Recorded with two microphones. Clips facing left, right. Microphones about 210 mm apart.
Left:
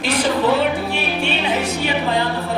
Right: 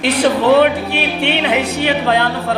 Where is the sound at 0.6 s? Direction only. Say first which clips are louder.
Right 6 dB; 65° right (ahead or behind).